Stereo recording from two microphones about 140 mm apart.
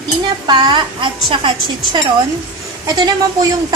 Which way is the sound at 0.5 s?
30° right (ahead or behind).